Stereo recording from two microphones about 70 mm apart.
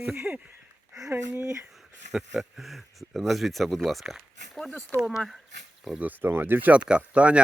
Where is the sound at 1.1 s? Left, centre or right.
Right.